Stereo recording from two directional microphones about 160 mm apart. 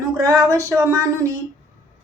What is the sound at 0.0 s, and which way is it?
A woman's voice, 20° right (ahead or behind).